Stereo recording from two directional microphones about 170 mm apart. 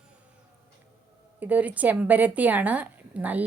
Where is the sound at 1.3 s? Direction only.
10° right (ahead or behind).